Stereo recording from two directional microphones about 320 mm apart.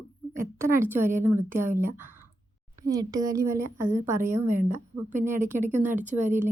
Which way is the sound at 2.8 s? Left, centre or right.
Centre.